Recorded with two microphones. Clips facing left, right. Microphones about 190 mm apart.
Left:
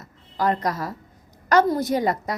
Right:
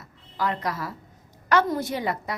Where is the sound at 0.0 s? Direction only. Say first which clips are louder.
Left 5 dB; 40° left (ahead or behind).